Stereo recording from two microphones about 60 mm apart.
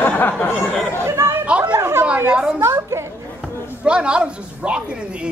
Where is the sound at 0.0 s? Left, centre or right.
Left.